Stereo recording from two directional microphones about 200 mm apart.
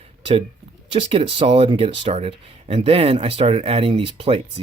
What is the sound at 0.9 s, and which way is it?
Speech, 25° right (ahead or behind).